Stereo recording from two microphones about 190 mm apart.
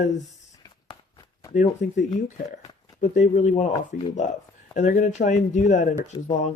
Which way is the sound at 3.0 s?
40° left (ahead or behind).